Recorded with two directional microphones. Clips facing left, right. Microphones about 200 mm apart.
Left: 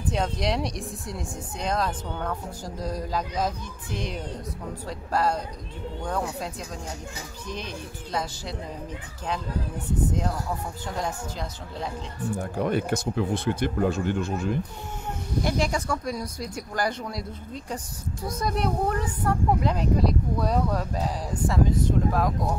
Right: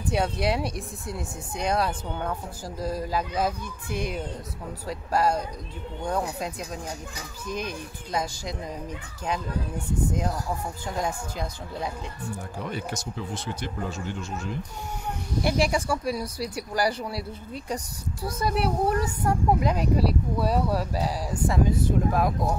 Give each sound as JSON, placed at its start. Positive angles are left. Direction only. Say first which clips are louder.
{"t": 0.1, "sound": "speech", "louder": "right 2 dB", "side_deg": -10}
{"t": 11.0, "sound": "speech", "louder": "right 2 dB", "side_deg": -10}
{"t": 12.5, "sound": "speech", "louder": "left 9 dB", "side_deg": 55}
{"t": 15.4, "sound": "speech", "louder": "right 3 dB", "side_deg": -10}
{"t": 18.2, "sound": "speech", "louder": "right 1 dB", "side_deg": -5}